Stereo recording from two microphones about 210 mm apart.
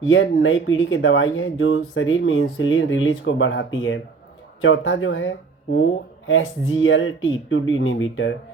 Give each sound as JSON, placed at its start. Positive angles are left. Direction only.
{"t": 0.1, "sound": "speech", "side_deg": 65}